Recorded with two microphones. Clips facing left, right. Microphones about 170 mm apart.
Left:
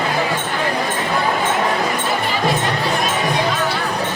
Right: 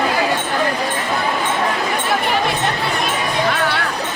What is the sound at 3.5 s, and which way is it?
Music, 65° right (ahead or behind).